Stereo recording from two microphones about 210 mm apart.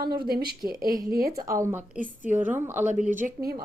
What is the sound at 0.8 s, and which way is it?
Speech, 40° right (ahead or behind).